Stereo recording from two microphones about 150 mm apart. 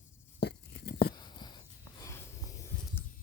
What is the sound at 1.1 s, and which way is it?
Writing, 30° left (ahead or behind).